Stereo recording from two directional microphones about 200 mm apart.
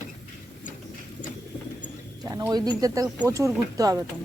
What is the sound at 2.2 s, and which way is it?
Speech, 15° right (ahead or behind).